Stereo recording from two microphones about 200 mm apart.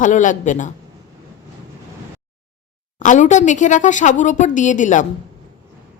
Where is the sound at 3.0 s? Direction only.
40° left (ahead or behind).